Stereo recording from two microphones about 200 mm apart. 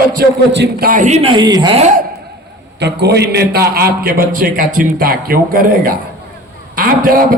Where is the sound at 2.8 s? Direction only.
55° right (ahead or behind).